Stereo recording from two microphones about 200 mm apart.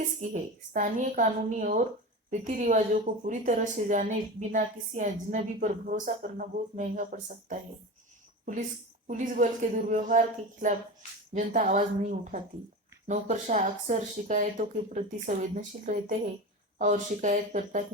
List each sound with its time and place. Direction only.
0.7 s a woman's voice: 40° right (ahead or behind)
9.0 s a woman's voice: 40° right (ahead or behind)